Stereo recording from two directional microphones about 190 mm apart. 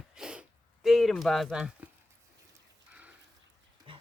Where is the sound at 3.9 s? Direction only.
25° right (ahead or behind).